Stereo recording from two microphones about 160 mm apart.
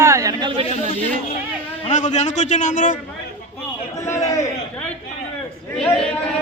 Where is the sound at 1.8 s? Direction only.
45° left (ahead or behind).